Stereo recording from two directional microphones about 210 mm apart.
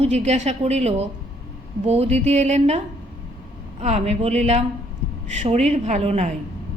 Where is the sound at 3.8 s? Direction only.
30° right (ahead or behind).